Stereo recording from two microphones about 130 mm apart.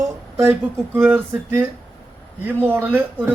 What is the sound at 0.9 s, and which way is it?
Speech, 15° right (ahead or behind).